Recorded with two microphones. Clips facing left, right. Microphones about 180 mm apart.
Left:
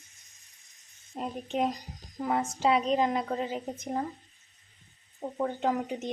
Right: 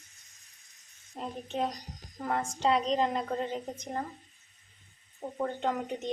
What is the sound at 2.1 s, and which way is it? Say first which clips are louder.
A woman's voice: left 3 dB; 5° left (ahead or behind).